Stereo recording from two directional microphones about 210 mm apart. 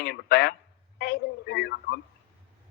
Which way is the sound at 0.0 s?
50° left (ahead or behind).